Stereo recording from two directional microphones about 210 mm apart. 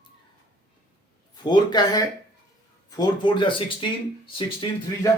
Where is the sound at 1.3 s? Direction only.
20° left (ahead or behind).